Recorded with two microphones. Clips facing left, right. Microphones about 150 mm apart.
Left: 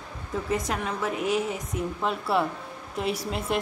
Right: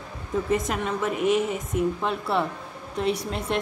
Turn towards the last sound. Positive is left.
turn(degrees=5)  # may be behind; listen again after turning